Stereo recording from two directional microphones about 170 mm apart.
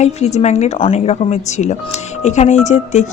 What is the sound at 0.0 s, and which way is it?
Speech, 40° left (ahead or behind).